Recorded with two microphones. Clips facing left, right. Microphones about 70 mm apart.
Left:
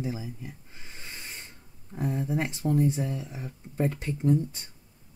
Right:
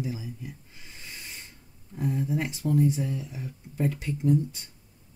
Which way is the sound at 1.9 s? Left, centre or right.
Left.